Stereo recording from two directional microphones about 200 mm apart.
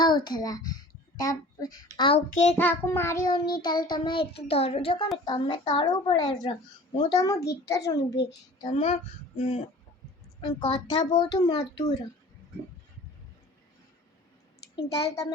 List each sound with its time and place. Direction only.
0.0 s a child's voice: 20° left (ahead or behind)
2.0 s a child's voice: 30° left (ahead or behind)
2.6 s child singing: 10° left (ahead or behind)
6.9 s a child's voice: 20° left (ahead or behind)
7.9 s a child's voice: 60° left (ahead or behind)
8.3 s child singing: 25° left (ahead or behind)
10.4 s child singing: 25° left (ahead or behind)